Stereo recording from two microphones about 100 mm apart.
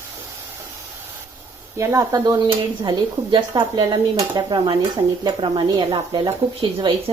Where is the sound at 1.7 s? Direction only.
30° right (ahead or behind).